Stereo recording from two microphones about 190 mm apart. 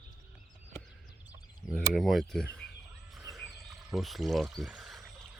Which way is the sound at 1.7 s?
Centre (ahead or behind).